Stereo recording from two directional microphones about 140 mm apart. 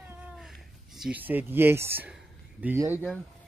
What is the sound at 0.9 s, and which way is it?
Speech, 10° right (ahead or behind).